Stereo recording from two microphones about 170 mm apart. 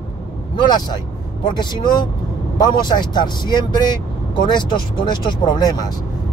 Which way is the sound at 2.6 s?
25° left (ahead or behind).